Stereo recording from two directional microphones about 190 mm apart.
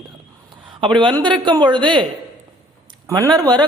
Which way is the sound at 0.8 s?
25° right (ahead or behind).